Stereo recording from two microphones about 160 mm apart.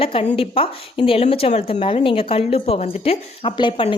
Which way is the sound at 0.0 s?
35° left (ahead or behind).